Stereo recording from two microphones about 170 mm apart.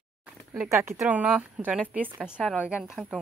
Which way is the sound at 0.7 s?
15° right (ahead or behind).